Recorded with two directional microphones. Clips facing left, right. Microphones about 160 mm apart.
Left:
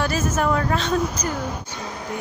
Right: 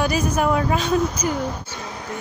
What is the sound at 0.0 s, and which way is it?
A woman's voice, 15° right (ahead or behind).